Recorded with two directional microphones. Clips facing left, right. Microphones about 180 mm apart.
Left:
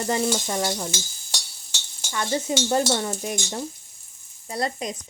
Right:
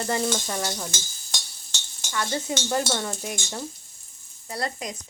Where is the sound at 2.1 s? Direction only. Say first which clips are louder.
Left 3 dB; 20° left (ahead or behind).